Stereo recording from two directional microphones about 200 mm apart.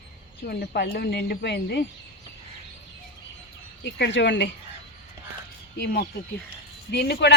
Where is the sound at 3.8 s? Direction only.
60° left (ahead or behind).